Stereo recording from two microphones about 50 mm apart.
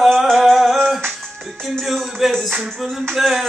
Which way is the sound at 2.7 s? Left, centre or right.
Centre.